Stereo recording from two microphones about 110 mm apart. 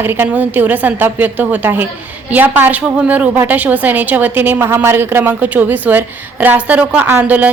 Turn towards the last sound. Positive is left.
turn(degrees=-15)  # may be behind; listen again after turning